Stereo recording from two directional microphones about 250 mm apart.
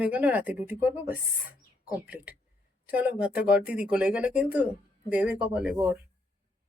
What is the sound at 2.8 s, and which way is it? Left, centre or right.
Speech, centre.